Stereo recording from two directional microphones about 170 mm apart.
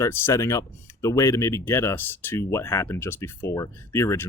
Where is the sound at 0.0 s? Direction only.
15° left (ahead or behind).